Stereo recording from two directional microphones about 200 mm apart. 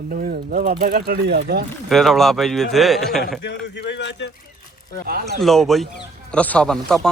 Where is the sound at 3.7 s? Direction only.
60° left (ahead or behind).